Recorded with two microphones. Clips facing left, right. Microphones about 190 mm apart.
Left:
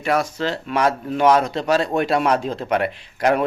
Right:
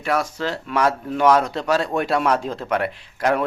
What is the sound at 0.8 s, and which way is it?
A man's voice, 15° left (ahead or behind).